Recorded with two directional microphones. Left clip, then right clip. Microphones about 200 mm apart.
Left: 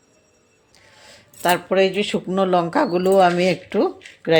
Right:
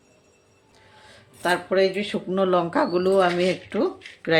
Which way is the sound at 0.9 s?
35° left (ahead or behind).